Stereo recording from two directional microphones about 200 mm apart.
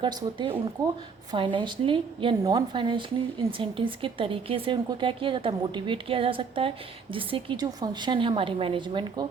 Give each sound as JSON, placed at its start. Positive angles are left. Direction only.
{"t": 0.0, "sound": "a woman's voice", "side_deg": -20}